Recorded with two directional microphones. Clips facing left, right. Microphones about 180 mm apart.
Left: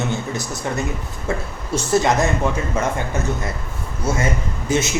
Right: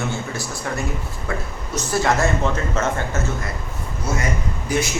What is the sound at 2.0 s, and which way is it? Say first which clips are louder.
A man's voice: left 1 dB; 20° left (ahead or behind).